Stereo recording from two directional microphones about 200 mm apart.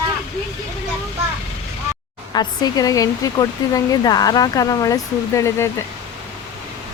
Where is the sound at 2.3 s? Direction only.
20° left (ahead or behind).